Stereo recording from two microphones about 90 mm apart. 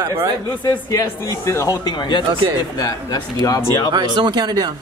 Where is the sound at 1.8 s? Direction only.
55° left (ahead or behind).